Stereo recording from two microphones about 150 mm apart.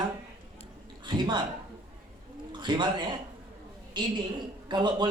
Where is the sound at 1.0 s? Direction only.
30° right (ahead or behind).